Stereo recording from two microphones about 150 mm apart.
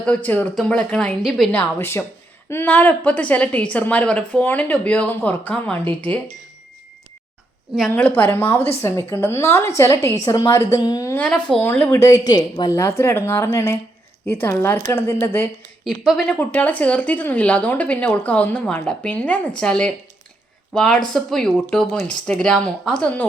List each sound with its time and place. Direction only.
0.0 s a woman's voice: 10° left (ahead or behind)
1.5 s a woman's voice: 15° left (ahead or behind)
7.9 s a woman's voice: 15° left (ahead or behind)
8.5 s a woman's voice: 40° left (ahead or behind)
8.8 s a woman's voice: 15° left (ahead or behind)
15.8 s a woman's voice: centre (ahead or behind)
16.4 s a woman's voice: 10° left (ahead or behind)